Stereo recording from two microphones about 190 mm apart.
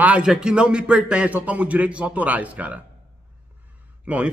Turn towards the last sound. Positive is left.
turn(degrees=-5)  # may be behind; listen again after turning